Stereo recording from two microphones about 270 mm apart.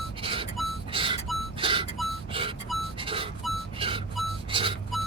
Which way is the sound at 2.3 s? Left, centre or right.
Centre.